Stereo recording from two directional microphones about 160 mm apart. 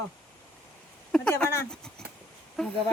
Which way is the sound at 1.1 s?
5° left (ahead or behind).